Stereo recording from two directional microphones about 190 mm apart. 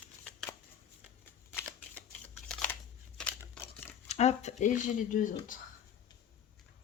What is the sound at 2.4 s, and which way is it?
Scissors, 5° left (ahead or behind).